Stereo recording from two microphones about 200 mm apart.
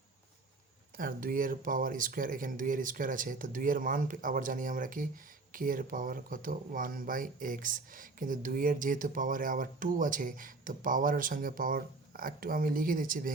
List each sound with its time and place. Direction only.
0.9 s speech: 45° right (ahead or behind)